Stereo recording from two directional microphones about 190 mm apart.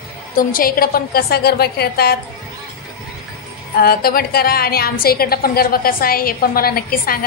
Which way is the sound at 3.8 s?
50° left (ahead or behind).